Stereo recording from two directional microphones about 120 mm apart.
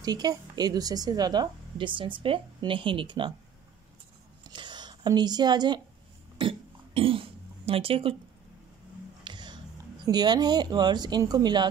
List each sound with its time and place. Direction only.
0.0 s a woman's voice: 35° right (ahead or behind)
4.5 s a sound: 40° right (ahead or behind)
6.4 s speech: 50° right (ahead or behind)
9.2 s music: 40° right (ahead or behind)
10.0 s a woman's voice: 35° right (ahead or behind)